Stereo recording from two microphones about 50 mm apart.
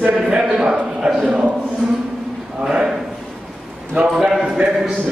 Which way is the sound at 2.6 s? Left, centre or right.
Centre.